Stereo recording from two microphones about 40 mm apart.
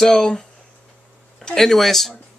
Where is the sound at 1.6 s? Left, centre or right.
Centre.